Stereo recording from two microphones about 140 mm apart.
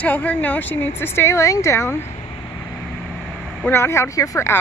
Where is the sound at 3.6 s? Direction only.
15° left (ahead or behind).